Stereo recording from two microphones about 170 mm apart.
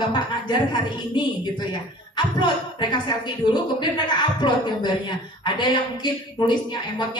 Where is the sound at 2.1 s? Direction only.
25° left (ahead or behind).